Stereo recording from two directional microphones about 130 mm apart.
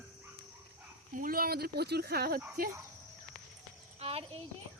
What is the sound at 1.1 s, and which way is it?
Speech, 90° right.